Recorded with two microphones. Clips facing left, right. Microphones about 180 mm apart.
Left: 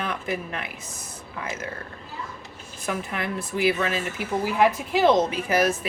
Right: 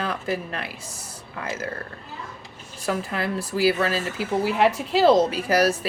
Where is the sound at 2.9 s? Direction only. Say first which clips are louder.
Right 3 dB; 35° right (ahead or behind).